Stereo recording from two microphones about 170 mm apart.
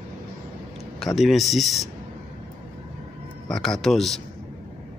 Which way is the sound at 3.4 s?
Centre (ahead or behind).